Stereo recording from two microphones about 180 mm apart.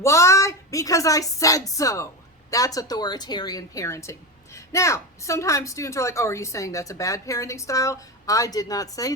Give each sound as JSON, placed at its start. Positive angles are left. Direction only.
{"t": 0.0, "sound": "a woman's voice", "side_deg": 15}